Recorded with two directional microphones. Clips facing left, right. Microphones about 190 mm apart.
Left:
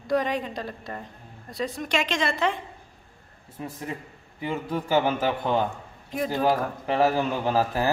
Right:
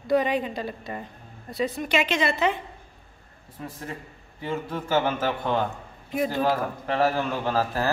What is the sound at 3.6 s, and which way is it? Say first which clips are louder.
A man's voice: left 2 dB; 15° left (ahead or behind).